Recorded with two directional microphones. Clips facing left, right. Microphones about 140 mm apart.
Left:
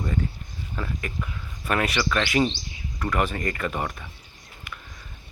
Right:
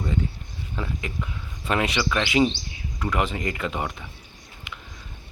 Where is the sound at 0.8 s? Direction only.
20° right (ahead or behind).